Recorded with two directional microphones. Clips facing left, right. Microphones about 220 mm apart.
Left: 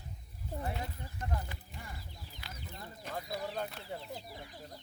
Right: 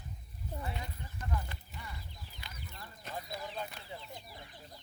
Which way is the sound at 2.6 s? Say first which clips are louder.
Left 5 dB; 25° left (ahead or behind).